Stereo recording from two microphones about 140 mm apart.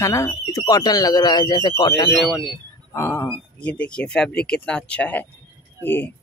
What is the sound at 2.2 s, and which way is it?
Speech, centre (ahead or behind).